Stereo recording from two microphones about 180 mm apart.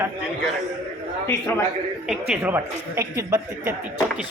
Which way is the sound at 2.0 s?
5° right (ahead or behind).